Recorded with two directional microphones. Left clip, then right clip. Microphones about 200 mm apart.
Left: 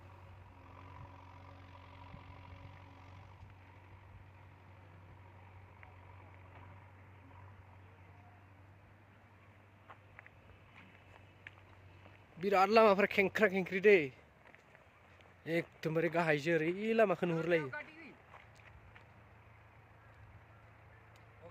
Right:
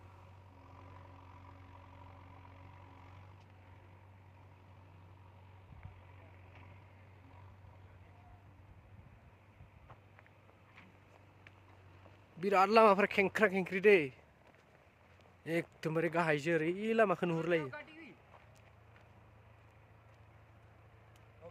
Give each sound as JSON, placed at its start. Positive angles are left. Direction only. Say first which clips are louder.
{"t": 0.7, "sound": "vehicle", "louder": "left 2 dB", "side_deg": 45}
{"t": 12.4, "sound": "speech", "louder": "right 1 dB", "side_deg": -10}
{"t": 15.4, "sound": "speech", "louder": "even", "side_deg": -5}
{"t": 17.7, "sound": "a sound", "louder": "left 2 dB", "side_deg": -60}